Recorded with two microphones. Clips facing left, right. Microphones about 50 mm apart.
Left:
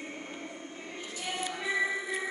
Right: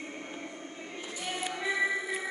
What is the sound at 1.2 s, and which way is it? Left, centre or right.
Music, centre.